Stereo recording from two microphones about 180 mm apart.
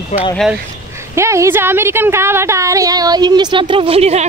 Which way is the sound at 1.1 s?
15° right (ahead or behind).